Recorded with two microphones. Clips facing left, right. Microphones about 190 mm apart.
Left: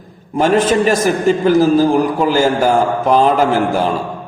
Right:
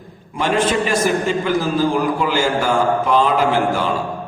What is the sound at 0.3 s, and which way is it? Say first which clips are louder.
A man's voice: left 5 dB; 45° left (ahead or behind).